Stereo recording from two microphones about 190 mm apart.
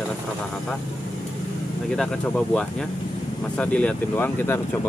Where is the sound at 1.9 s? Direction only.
5° left (ahead or behind).